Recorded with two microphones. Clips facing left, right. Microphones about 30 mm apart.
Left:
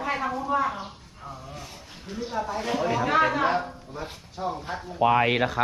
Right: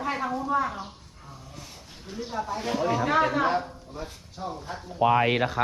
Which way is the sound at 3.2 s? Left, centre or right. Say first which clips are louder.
Left 1 dB; left.